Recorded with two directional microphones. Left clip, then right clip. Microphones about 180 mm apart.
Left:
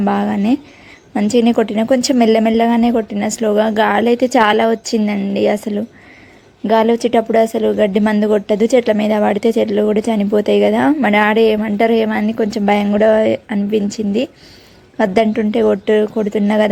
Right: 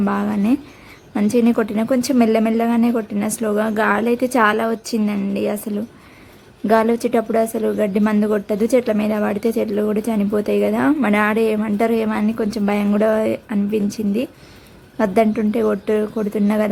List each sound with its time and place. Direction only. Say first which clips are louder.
0.0 s speech: left 4 dB; 15° left (ahead or behind)